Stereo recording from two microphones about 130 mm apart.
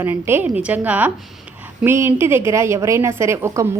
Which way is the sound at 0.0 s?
15° right (ahead or behind).